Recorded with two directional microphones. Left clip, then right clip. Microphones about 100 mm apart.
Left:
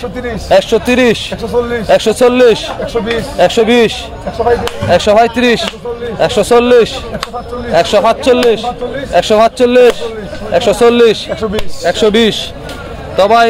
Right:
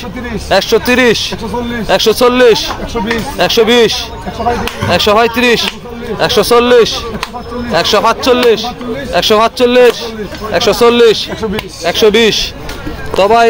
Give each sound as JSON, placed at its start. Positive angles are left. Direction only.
{"t": 0.5, "sound": "a man's voice", "side_deg": 30}
{"t": 13.2, "sound": "speech", "side_deg": 10}